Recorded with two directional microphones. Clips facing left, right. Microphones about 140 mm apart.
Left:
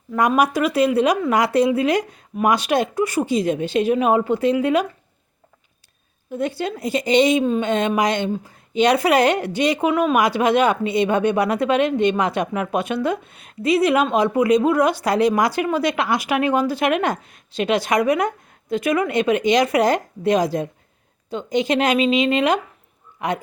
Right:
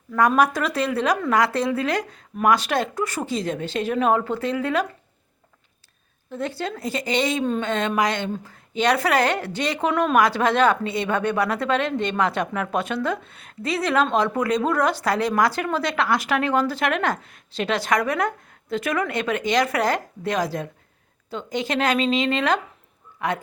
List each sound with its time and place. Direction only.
0.1 s a woman's voice: 15° left (ahead or behind)
6.3 s a woman's voice: 15° left (ahead or behind)